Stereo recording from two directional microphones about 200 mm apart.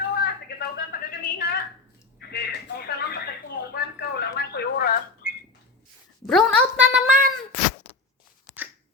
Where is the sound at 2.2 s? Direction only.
55° left (ahead or behind).